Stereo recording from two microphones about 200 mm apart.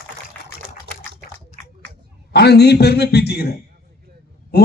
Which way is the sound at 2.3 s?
55° left (ahead or behind).